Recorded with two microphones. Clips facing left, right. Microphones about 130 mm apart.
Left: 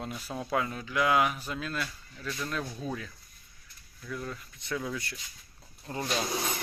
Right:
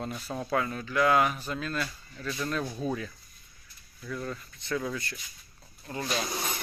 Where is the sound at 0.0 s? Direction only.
5° left (ahead or behind).